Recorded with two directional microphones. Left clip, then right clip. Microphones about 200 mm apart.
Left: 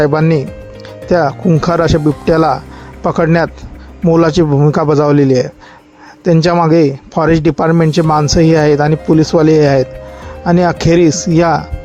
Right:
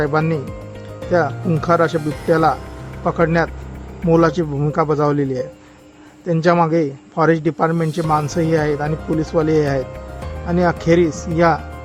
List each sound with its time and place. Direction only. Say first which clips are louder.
0.0 s speech: left 7 dB; 35° left (ahead or behind)
1.5 s speech: left 4 dB; 35° left (ahead or behind)